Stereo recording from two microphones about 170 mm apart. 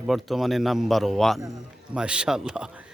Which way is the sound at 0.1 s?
Centre (ahead or behind).